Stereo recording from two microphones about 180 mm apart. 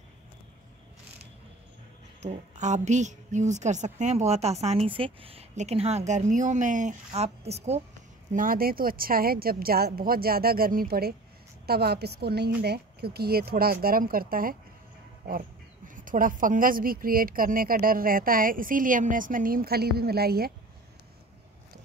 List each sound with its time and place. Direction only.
2.2 s a woman's voice: 40° right (ahead or behind)
8.3 s a woman's voice: 50° right (ahead or behind)